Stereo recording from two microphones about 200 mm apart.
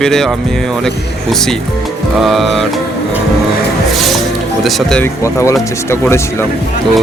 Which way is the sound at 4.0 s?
Centre (ahead or behind).